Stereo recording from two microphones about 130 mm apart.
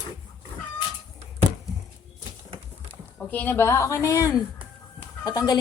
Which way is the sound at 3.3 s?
15° left (ahead or behind).